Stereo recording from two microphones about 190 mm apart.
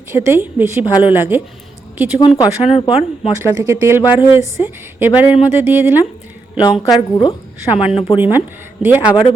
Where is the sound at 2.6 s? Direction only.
35° left (ahead or behind).